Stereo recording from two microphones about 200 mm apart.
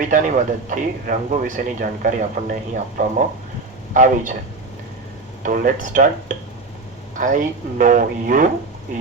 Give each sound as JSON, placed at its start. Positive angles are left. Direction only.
{"t": 0.1, "sound": "speech", "side_deg": -40}
{"t": 5.4, "sound": "speech", "side_deg": -40}